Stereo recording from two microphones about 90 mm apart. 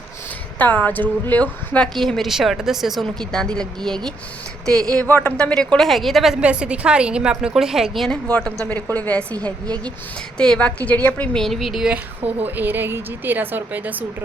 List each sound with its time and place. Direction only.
0.6 s a woman's voice: 20° left (ahead or behind)
2.0 s a woman's voice: 5° left (ahead or behind)
4.9 s speech: 20° left (ahead or behind)
5.4 s a woman's voice: 10° left (ahead or behind)
8.3 s a woman's voice: 15° left (ahead or behind)
10.3 s a woman's voice: 10° left (ahead or behind)
11.3 s a woman's voice: centre (ahead or behind)
12.4 s a woman's voice: 20° right (ahead or behind)